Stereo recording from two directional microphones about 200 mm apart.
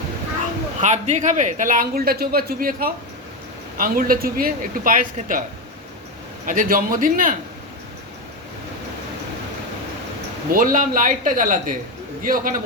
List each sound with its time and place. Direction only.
0.8 s a man's voice: 35° right (ahead or behind)
6.4 s a man's voice: 45° right (ahead or behind)
10.5 s a man's voice: 40° right (ahead or behind)